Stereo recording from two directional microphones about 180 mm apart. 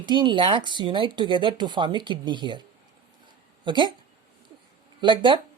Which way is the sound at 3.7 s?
25° right (ahead or behind).